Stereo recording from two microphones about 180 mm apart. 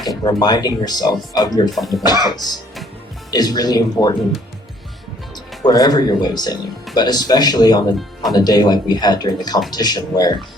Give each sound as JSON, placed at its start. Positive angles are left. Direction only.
{"t": 0.0, "sound": "speech", "side_deg": 20}
{"t": 1.7, "sound": "speech", "side_deg": 0}
{"t": 3.3, "sound": "speech", "side_deg": 20}
{"t": 5.6, "sound": "speech", "side_deg": 20}